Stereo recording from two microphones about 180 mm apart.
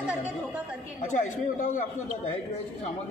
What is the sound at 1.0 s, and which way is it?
Speech, 45° left (ahead or behind).